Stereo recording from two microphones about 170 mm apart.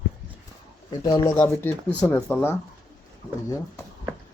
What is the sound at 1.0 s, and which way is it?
Speech, 25° left (ahead or behind).